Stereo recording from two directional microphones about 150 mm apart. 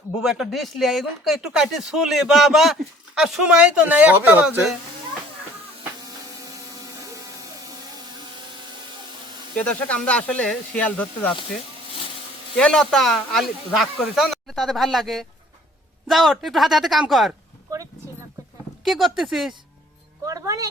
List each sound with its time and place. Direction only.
0.2 s speech: centre (ahead or behind)
9.6 s speech: 10° left (ahead or behind)
12.5 s speech: 5° left (ahead or behind)
18.9 s speech: centre (ahead or behind)
20.2 s speech: 20° right (ahead or behind)